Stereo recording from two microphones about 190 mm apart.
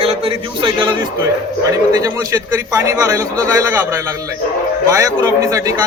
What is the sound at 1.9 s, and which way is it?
A man's voice, 20° right (ahead or behind).